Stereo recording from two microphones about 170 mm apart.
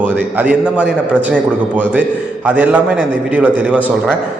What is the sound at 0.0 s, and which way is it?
A man's voice, 10° right (ahead or behind).